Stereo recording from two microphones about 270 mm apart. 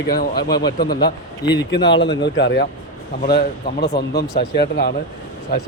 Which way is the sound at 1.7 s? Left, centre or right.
Left.